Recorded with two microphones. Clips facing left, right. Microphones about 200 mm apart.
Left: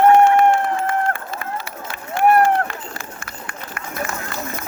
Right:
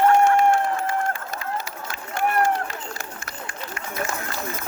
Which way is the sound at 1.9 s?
60° left (ahead or behind).